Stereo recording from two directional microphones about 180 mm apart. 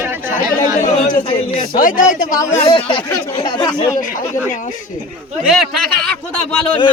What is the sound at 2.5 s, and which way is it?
Speech, 30° left (ahead or behind).